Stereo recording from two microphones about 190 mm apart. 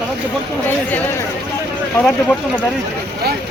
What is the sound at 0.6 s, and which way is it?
Speech, 10° left (ahead or behind).